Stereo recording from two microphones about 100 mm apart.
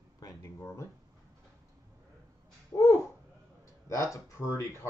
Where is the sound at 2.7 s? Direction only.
35° left (ahead or behind).